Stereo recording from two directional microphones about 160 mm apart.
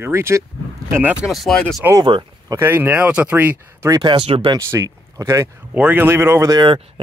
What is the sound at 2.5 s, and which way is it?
Speech, 15° right (ahead or behind).